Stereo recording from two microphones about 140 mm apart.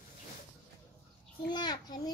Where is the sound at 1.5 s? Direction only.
30° left (ahead or behind).